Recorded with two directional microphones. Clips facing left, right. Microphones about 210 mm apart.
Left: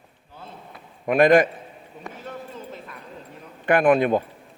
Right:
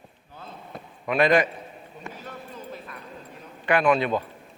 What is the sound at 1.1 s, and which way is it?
Speech, 50° left (ahead or behind).